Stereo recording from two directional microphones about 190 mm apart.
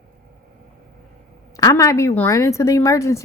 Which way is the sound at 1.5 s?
15° left (ahead or behind).